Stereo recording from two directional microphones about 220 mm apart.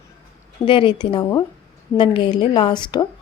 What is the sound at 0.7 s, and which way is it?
Speech, 25° left (ahead or behind).